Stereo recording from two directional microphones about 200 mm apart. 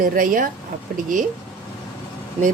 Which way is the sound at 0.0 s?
45° right (ahead or behind).